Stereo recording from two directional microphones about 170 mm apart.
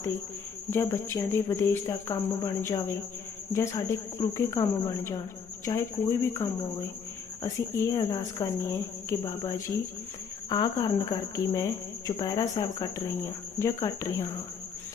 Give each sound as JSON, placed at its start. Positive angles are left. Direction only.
{"t": 0.7, "sound": "a woman's voice", "side_deg": 15}